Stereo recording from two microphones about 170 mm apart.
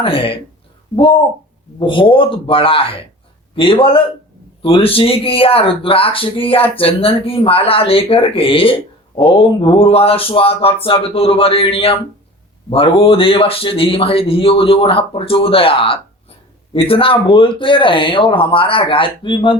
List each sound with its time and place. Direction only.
0.0 s speech: 35° left (ahead or behind)
1.8 s speech: 30° left (ahead or behind)